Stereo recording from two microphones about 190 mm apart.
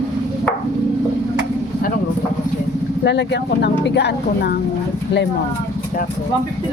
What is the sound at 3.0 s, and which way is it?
Speech, 65° left (ahead or behind).